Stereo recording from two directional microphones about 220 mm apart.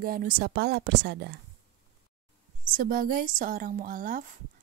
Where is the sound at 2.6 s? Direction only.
40° right (ahead or behind).